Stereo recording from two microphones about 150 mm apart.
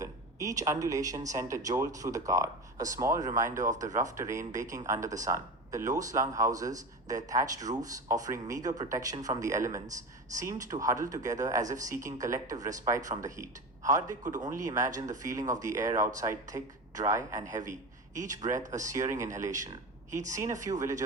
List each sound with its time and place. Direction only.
0.0 s speech: 20° right (ahead or behind)
3.6 s speech: 55° right (ahead or behind)
4.2 s speech: 20° right (ahead or behind)
15.4 s speech: 55° right (ahead or behind)
16.1 s speech: 20° right (ahead or behind)
17.7 s speech: 55° right (ahead or behind)
20.7 s speech: 20° right (ahead or behind)